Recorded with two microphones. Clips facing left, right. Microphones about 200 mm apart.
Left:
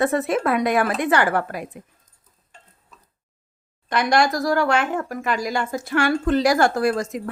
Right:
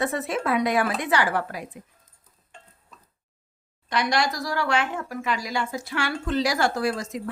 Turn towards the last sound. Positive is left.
turn(degrees=50)  # may be behind; listen again after turning